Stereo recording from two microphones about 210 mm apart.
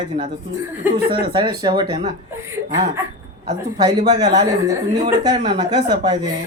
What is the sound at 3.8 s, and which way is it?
Speech, 30° right (ahead or behind).